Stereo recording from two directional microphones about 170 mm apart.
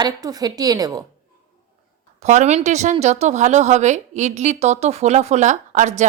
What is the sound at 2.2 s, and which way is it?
Speech, 40° right (ahead or behind).